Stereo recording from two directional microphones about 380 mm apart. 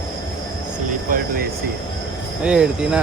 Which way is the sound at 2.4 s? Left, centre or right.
Centre.